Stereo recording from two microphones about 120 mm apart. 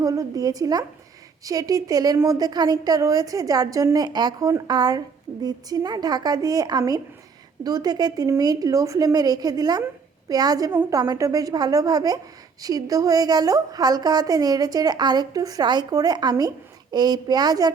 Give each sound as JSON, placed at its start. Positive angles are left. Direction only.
{"t": 0.0, "sound": "a woman's voice", "side_deg": -30}
{"t": 10.7, "sound": "a woman's voice", "side_deg": -20}
{"t": 10.9, "sound": "a woman's voice", "side_deg": -35}